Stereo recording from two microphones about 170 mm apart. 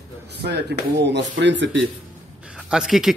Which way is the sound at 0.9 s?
90° right.